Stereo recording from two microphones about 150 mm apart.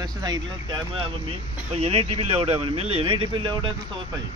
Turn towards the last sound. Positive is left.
turn(degrees=-35)  # may be behind; listen again after turning